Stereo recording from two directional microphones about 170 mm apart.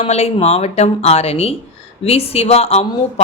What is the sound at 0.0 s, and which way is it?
A woman's voice, 35° left (ahead or behind).